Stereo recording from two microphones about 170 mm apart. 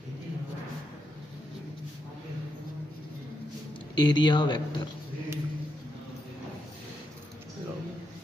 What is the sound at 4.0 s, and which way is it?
Speech, 25° left (ahead or behind).